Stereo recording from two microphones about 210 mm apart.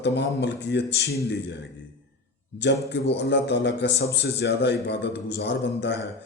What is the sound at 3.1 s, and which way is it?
A man's voice, 55° left (ahead or behind).